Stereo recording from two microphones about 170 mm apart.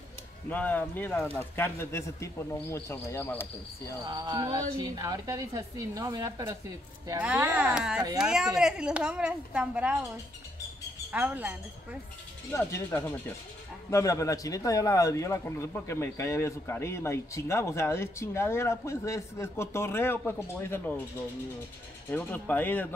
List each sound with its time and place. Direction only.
0.5 s a man's voice: 10° left (ahead or behind)
4.0 s a woman's voice: 25° right (ahead or behind); by 9.9 s 5° right (ahead or behind)
11.1 s speech: 10° right (ahead or behind)
12.4 s a man's voice: 15° left (ahead or behind)
22.1 s a man's voice: 10° left (ahead or behind)